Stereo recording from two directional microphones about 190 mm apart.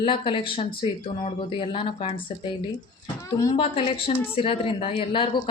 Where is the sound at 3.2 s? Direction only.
20° left (ahead or behind).